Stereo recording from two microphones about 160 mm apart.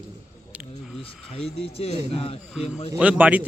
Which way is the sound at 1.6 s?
35° left (ahead or behind).